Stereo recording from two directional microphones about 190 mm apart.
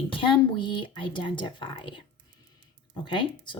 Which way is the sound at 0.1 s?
25° left (ahead or behind).